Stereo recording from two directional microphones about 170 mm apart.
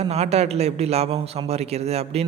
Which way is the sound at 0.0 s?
35° right (ahead or behind).